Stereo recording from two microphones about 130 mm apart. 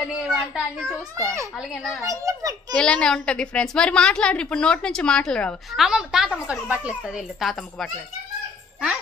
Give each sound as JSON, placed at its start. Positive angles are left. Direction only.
{"t": 0.0, "sound": "a woman's voice", "side_deg": 0}
{"t": 0.8, "sound": "a child's voice", "side_deg": -25}
{"t": 1.6, "sound": "a woman's voice", "side_deg": 0}
{"t": 2.0, "sound": "a child's voice", "side_deg": -25}
{"t": 2.8, "sound": "a woman's voice", "side_deg": 5}